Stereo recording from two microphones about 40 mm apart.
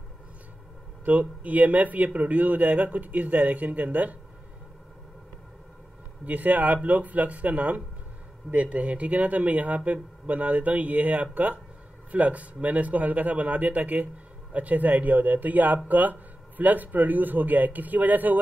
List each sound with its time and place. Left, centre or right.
1.0 s speech: right
6.2 s speech: right